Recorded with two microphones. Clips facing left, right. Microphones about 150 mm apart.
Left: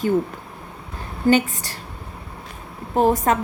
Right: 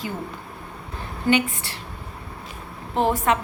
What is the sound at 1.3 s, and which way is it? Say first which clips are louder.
Speech: left 4 dB; 40° left (ahead or behind).